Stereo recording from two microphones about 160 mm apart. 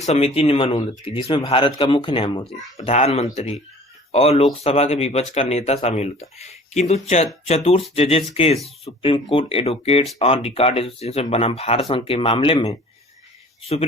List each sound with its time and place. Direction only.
0.0 s speech: 40° left (ahead or behind)